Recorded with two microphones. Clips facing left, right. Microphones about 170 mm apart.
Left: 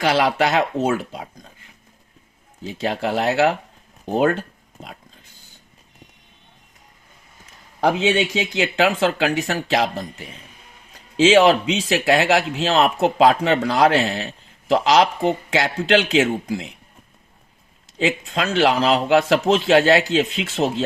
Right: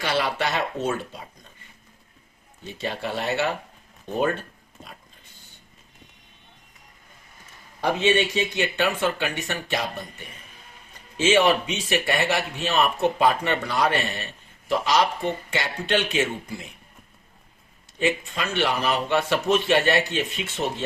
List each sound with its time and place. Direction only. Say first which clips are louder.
0.0 s speech: left 7 dB; 90° left
7.8 s speech: left 3 dB; 90° left
17.9 s speech: left 3 dB; 90° left